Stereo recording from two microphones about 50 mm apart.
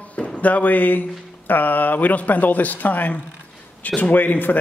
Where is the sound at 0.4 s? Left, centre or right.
Left.